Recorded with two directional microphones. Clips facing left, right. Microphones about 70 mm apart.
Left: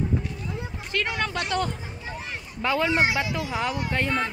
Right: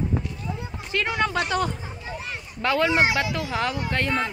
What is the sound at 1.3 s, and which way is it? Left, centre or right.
Speech, centre.